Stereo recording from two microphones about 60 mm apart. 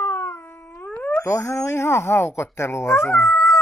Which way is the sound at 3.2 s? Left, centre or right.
Left.